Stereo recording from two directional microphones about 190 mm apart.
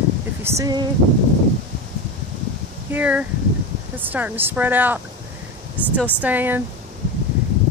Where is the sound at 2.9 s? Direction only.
5° right (ahead or behind).